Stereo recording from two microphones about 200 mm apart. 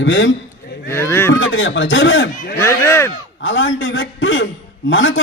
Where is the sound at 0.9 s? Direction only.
15° left (ahead or behind).